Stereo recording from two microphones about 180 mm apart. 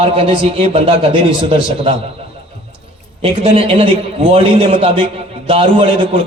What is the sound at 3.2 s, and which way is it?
A man's voice, 30° right (ahead or behind).